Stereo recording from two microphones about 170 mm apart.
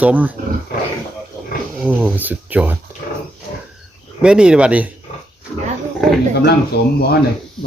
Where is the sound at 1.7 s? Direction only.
10° right (ahead or behind).